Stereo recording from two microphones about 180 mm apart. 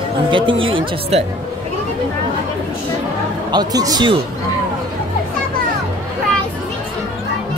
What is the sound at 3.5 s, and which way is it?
Speech, 20° right (ahead or behind).